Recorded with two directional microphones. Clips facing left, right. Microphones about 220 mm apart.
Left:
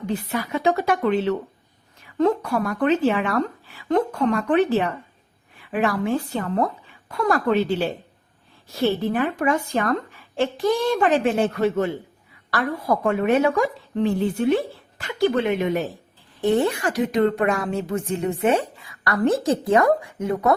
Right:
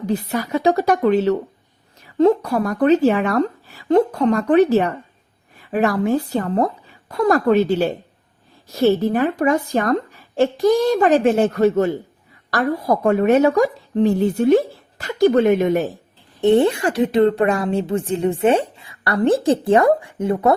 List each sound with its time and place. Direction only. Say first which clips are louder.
0.0 s a woman's voice: right 4 dB; 40° right (ahead or behind)
16.4 s a woman's voice: right 5 dB; 25° right (ahead or behind)